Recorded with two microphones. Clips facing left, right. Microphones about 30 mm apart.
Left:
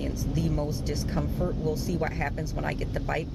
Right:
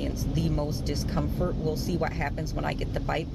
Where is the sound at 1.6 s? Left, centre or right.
Centre.